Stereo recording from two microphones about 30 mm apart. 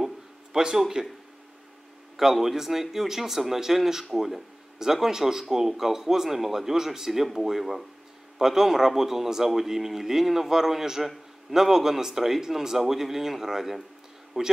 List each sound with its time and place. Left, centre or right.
0.0 s a sound: centre
1.0 s speech: right
2.1 s speech: centre